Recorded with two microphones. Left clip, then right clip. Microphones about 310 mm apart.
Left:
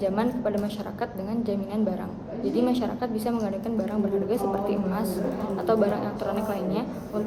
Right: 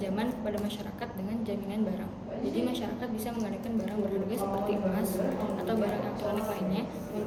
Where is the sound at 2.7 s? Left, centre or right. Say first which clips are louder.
Left 7 dB; centre.